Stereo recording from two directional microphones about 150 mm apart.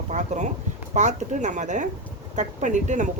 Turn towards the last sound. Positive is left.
turn(degrees=-55)  # may be behind; listen again after turning